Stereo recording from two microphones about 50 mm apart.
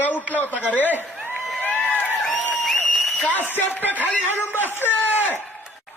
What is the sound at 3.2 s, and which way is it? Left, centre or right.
A man's voice, left.